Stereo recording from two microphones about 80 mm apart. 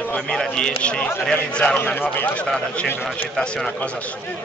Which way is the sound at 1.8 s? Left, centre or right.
Left.